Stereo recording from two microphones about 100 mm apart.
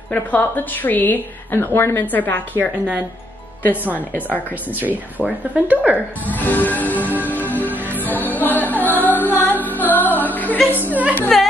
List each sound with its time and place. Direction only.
0.1 s a woman's voice: 15° left (ahead or behind)
2.6 s speech: 10° right (ahead or behind)
4.1 s a woman's voice: 20° left (ahead or behind)
4.6 s speech: 15° right (ahead or behind)
6.3 s a woman's voice: 15° left (ahead or behind)
7.1 s music: 15° right (ahead or behind)
8.0 s music: 15° left (ahead or behind)
10.7 s a woman's voice: 15° left (ahead or behind)
11.3 s speech: 5° left (ahead or behind)